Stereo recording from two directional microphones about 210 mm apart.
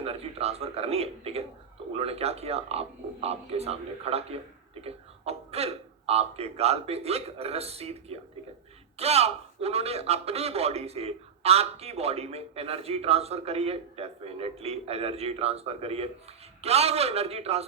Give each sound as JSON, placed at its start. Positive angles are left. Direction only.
{"t": 0.0, "sound": "a man's voice", "side_deg": -30}